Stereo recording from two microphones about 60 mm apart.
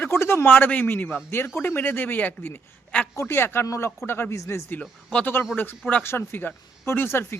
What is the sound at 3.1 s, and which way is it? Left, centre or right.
Speech, left.